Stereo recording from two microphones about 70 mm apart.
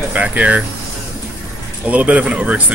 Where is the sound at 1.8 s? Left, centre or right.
Right.